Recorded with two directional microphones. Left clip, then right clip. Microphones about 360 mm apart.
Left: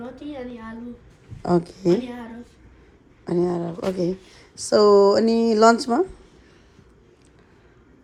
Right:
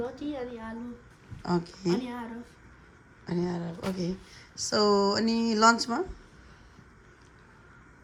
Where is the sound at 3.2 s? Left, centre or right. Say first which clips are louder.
Left 10 dB; centre.